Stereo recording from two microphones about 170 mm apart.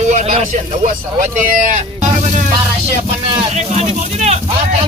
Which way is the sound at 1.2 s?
50° right (ahead or behind).